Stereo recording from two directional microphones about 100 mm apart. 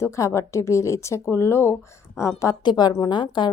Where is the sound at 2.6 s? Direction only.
45° left (ahead or behind).